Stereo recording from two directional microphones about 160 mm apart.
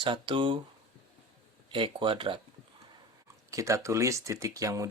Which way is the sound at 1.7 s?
30° right (ahead or behind).